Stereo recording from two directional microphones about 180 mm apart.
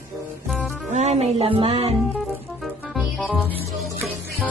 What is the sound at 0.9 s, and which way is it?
Music, 40° right (ahead or behind).